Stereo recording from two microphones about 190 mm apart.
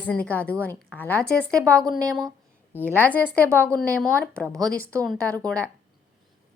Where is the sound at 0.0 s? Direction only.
5° left (ahead or behind).